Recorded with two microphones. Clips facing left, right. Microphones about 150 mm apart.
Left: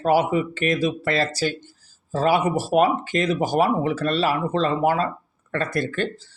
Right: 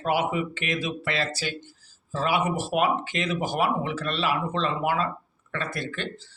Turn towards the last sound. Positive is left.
turn(degrees=45)  # may be behind; listen again after turning